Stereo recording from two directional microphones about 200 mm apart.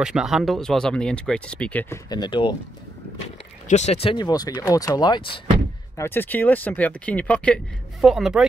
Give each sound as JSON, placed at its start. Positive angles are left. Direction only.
{"t": 0.0, "sound": "speech", "side_deg": 0}
{"t": 2.0, "sound": "speech", "side_deg": 20}
{"t": 3.6, "sound": "speech", "side_deg": 35}
{"t": 5.9, "sound": "speech", "side_deg": 10}